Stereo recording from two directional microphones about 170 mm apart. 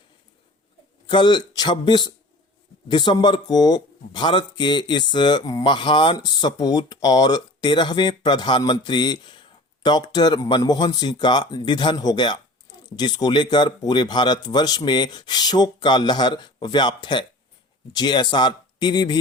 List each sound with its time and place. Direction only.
1.0 s speech: 25° left (ahead or behind)